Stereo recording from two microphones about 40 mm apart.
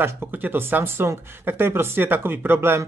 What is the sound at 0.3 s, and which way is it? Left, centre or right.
Speech, right.